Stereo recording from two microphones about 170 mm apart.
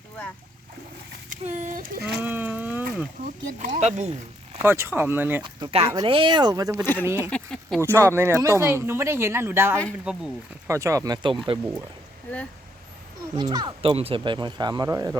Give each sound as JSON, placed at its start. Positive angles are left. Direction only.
{"t": 1.3, "sound": "a sound", "side_deg": -45}
{"t": 2.2, "sound": "a sound", "side_deg": -10}
{"t": 3.6, "sound": "speech", "side_deg": -45}
{"t": 4.6, "sound": "speech", "side_deg": -15}
{"t": 5.4, "sound": "speech", "side_deg": -25}
{"t": 7.3, "sound": "speech", "side_deg": 5}
{"t": 7.8, "sound": "speech", "side_deg": -15}
{"t": 10.7, "sound": "speech", "side_deg": -15}
{"t": 13.3, "sound": "speech", "side_deg": -25}